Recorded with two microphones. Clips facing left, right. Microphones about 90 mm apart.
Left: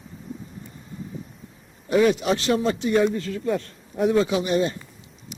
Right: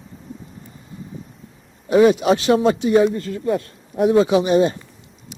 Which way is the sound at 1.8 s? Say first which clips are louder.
Right 6 dB; 20° right (ahead or behind).